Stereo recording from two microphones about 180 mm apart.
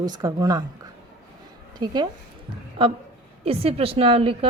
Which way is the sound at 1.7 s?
20° right (ahead or behind).